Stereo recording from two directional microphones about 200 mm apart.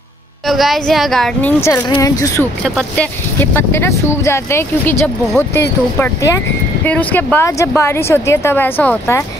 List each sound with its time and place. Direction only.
0.5 s speech: centre (ahead or behind)
1.9 s speech: 15° left (ahead or behind)